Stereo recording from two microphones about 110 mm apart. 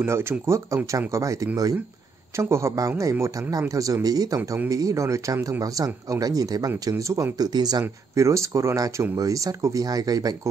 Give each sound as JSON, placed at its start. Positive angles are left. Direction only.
{"t": 0.0, "sound": "speech", "side_deg": -20}